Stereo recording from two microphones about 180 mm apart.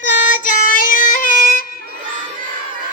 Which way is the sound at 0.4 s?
50° left (ahead or behind).